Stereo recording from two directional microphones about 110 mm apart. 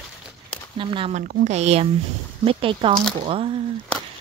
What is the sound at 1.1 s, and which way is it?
Speech, 90° right.